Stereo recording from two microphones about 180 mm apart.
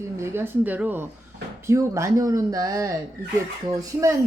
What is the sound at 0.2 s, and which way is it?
Speech, 10° right (ahead or behind).